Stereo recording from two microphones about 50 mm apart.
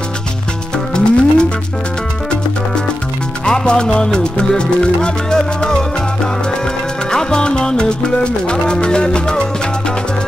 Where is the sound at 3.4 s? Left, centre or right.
Centre.